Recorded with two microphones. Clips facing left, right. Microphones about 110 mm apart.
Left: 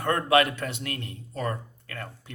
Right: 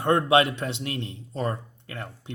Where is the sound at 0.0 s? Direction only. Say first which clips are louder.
Right 2 dB; 20° right (ahead or behind).